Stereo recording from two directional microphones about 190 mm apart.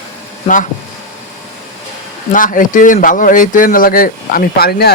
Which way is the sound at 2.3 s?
45° left (ahead or behind).